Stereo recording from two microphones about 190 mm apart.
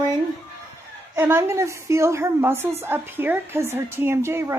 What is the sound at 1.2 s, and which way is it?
A woman's voice, 10° right (ahead or behind).